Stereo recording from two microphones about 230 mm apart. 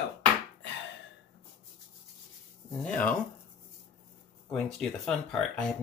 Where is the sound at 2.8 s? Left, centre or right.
Centre.